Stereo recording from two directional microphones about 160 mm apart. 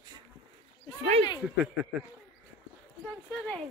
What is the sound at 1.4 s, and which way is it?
Speech, 5° right (ahead or behind).